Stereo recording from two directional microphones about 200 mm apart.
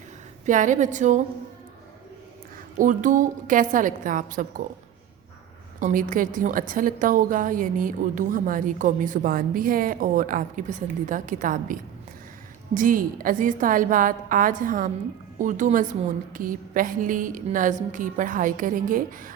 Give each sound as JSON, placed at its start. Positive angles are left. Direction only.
{"t": 0.4, "sound": "a woman's voice", "side_deg": -40}
{"t": 2.7, "sound": "a woman's voice", "side_deg": -40}
{"t": 5.8, "sound": "a woman's voice", "side_deg": -40}